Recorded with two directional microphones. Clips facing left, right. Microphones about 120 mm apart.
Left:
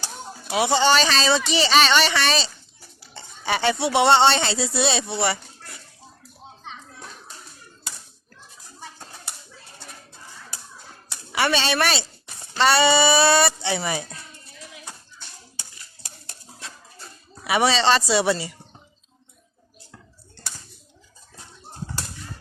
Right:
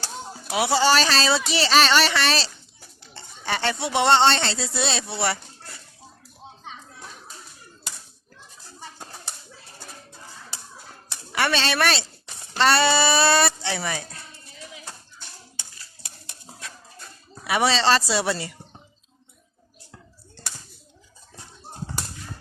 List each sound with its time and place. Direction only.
0.4 s speech: 5° right (ahead or behind)
11.3 s speech: centre (ahead or behind)
16.6 s a sound: 25° left (ahead or behind)
17.4 s speech: centre (ahead or behind)